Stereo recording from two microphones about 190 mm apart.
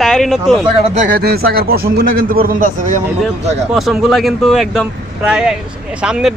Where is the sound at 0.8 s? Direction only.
40° right (ahead or behind).